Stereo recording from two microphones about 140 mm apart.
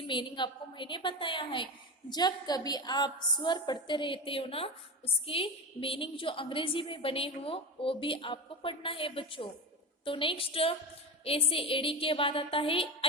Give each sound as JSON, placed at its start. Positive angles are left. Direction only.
{"t": 0.1, "sound": "a woman's voice", "side_deg": 35}